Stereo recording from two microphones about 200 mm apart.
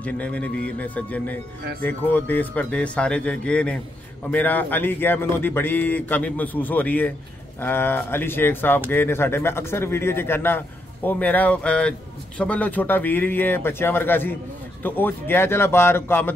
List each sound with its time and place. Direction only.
0.0 s speech: 5° left (ahead or behind)